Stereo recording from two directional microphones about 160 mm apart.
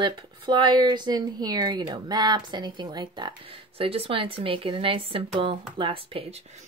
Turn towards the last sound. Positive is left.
turn(degrees=-35)  # may be behind; listen again after turning